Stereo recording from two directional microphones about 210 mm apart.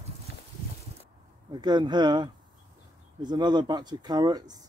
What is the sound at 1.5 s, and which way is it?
Speech, 20° right (ahead or behind).